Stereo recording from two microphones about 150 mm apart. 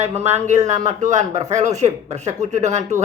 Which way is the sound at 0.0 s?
45° right (ahead or behind).